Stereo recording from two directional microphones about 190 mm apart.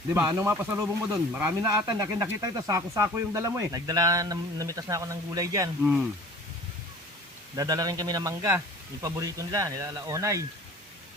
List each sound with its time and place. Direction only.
0.1 s speech: 15° right (ahead or behind)
5.8 s speech: 5° right (ahead or behind)
7.5 s speech: 20° right (ahead or behind)